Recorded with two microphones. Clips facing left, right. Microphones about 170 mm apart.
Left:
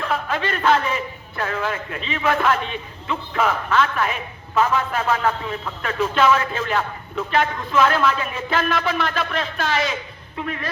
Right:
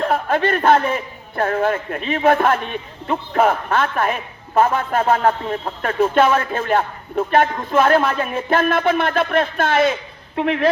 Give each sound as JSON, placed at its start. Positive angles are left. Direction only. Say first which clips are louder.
{"t": 0.0, "sound": "a man's voice", "louder": "right 6 dB", "side_deg": -55}